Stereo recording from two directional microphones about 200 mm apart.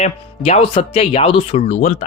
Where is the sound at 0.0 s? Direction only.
35° left (ahead or behind).